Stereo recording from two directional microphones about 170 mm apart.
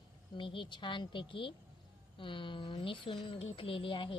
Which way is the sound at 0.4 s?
30° left (ahead or behind).